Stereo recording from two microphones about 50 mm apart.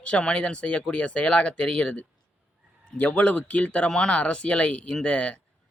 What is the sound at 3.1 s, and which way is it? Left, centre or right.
Speech, left.